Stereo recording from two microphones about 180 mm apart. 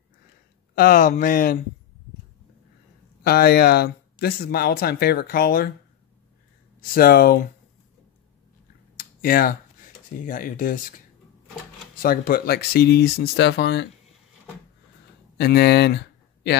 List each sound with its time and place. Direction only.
0.7 s speech: 50° left (ahead or behind)
3.3 s speech: 60° left (ahead or behind)
6.8 s speech: 55° left (ahead or behind)
8.9 s a sound: 55° left (ahead or behind)
12.0 s speech: 55° left (ahead or behind); by 13.8 s 75° left (ahead or behind)
15.3 s speech: 60° left (ahead or behind)